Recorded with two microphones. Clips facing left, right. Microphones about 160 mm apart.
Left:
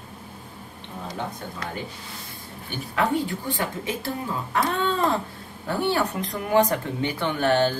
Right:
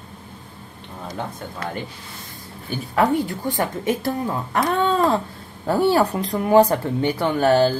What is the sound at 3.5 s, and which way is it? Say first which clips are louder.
A woman's voice: right 6 dB; 45° right (ahead or behind).